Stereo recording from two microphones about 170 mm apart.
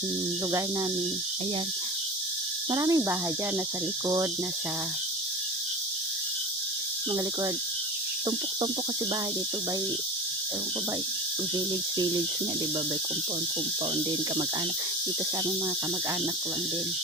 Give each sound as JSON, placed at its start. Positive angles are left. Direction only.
{"t": 2.6, "sound": "speech", "side_deg": -20}
{"t": 11.5, "sound": "speech", "side_deg": -25}